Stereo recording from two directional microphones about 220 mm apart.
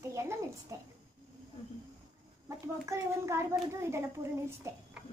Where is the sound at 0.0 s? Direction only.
15° right (ahead or behind).